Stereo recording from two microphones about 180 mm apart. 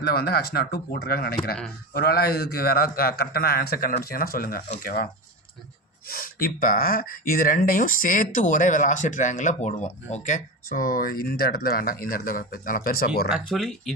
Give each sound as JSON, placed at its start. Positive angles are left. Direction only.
{"t": 0.0, "sound": "a man's voice", "side_deg": 60}
{"t": 6.1, "sound": "speech", "side_deg": 55}
{"t": 13.3, "sound": "speech", "side_deg": 0}